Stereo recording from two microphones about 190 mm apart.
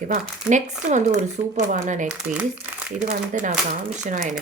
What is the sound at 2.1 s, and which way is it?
Speech, 5° right (ahead or behind).